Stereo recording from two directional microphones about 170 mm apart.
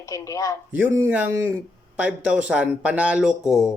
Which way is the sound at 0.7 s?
15° right (ahead or behind).